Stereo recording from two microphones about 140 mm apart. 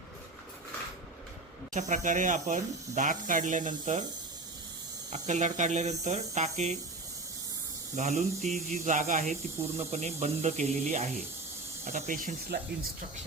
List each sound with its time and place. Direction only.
1.7 s speech: 65° right (ahead or behind)
5.1 s speech: 55° right (ahead or behind)
7.9 s speech: 55° right (ahead or behind)
11.9 s speech: 65° right (ahead or behind); by 12.9 s 85° right